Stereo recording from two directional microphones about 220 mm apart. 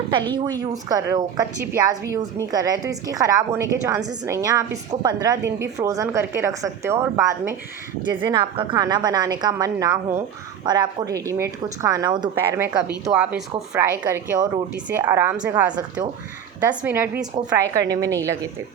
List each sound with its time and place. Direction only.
0.1 s a woman's voice: 20° right (ahead or behind)